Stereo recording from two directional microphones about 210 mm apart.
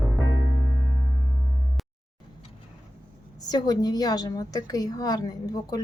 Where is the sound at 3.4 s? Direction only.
20° left (ahead or behind).